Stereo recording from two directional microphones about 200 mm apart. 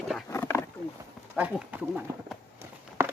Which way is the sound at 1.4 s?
5° right (ahead or behind).